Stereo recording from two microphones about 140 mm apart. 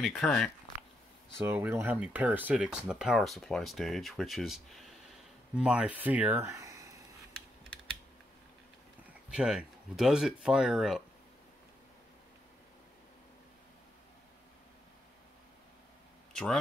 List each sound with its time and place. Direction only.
0.0 s speech: 5° left (ahead or behind)
0.7 s a sound: 55° left (ahead or behind)
1.4 s speech: 15° right (ahead or behind)
9.3 s speech: 5° right (ahead or behind)